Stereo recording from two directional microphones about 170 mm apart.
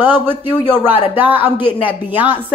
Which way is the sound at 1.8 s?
10° right (ahead or behind).